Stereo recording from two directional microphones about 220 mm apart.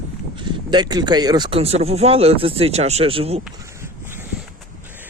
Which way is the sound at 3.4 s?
10° right (ahead or behind).